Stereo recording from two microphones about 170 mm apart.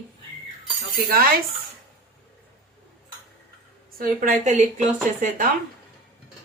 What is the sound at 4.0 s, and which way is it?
Speech, 50° right (ahead or behind).